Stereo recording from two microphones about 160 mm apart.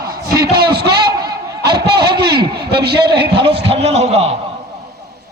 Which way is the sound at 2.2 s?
90° right.